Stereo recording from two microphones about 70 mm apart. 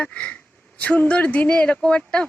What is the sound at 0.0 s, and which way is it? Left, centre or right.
Speech, centre.